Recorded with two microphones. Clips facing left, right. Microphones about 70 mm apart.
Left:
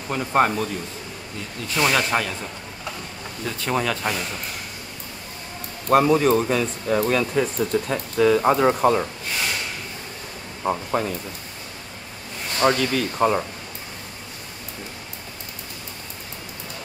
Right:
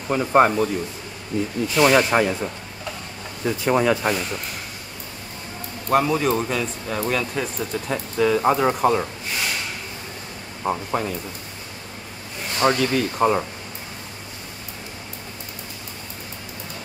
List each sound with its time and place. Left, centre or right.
0.1 s speech: centre
1.8 s speech: centre
5.9 s speech: centre
10.6 s speech: centre
12.5 s speech: centre